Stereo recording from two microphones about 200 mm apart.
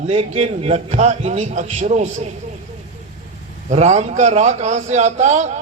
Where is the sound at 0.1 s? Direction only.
35° right (ahead or behind).